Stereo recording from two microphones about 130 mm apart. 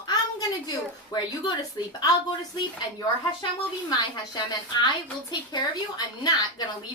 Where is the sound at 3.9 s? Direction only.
30° left (ahead or behind).